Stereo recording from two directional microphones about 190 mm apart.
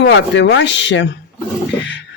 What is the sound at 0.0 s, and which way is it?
Speech, 70° left (ahead or behind).